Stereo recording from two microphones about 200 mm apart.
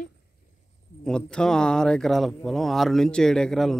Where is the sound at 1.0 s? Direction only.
5° left (ahead or behind).